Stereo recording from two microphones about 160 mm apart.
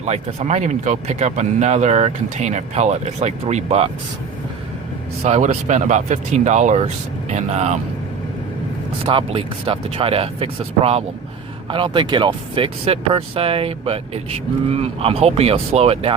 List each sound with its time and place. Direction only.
0.0 s speech: 45° right (ahead or behind)
5.2 s speech: 45° right (ahead or behind)
9.0 s speech: 35° right (ahead or behind)